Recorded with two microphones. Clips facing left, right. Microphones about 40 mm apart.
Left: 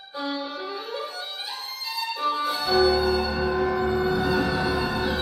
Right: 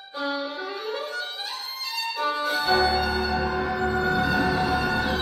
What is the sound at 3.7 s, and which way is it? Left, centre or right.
Music, centre.